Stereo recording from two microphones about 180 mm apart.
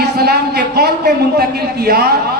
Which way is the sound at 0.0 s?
65° right (ahead or behind).